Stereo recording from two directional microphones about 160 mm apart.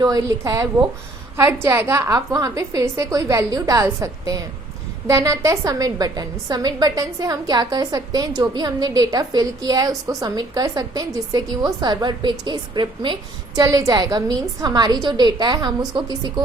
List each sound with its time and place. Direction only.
0.0 s a woman's voice: 20° right (ahead or behind)